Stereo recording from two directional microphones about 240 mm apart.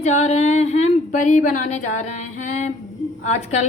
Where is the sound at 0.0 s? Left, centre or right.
Left.